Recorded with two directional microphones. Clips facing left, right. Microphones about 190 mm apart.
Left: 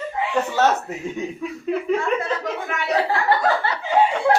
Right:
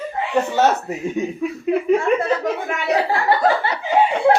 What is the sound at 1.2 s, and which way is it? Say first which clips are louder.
Speech: right 6 dB; 10° right (ahead or behind).